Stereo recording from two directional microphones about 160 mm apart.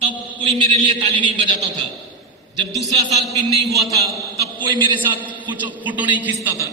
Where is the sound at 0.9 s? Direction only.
30° right (ahead or behind).